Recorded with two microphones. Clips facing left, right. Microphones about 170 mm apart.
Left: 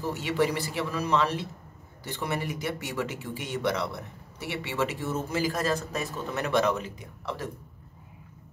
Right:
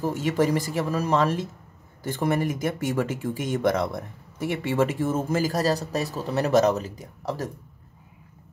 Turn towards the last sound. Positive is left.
turn(degrees=-40)  # may be behind; listen again after turning